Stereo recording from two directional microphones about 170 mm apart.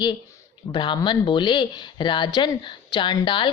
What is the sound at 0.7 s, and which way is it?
Speech, 25° left (ahead or behind).